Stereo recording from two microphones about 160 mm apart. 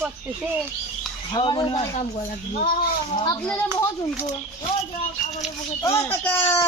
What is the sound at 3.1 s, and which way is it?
Speech, 30° left (ahead or behind).